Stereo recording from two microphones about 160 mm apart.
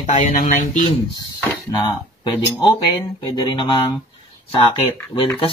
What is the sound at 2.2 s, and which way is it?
Speech, 30° left (ahead or behind).